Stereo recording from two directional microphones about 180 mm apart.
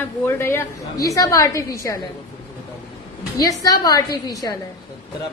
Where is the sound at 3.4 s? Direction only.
20° left (ahead or behind).